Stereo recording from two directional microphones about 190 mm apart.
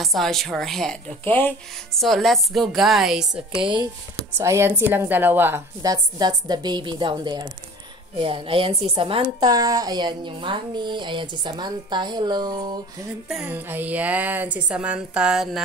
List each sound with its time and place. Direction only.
0.0 s speech: centre (ahead or behind)
3.5 s a woman's voice: 25° right (ahead or behind)
13.3 s a woman's voice: 5° right (ahead or behind)